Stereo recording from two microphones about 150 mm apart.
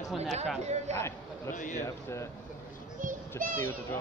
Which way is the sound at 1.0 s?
20° left (ahead or behind).